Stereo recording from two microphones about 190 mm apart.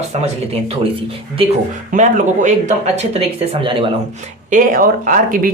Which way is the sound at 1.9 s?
40° right (ahead or behind).